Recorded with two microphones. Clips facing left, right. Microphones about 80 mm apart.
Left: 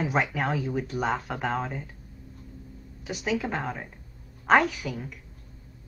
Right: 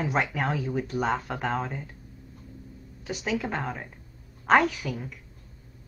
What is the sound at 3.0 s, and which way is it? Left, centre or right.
Speech, centre.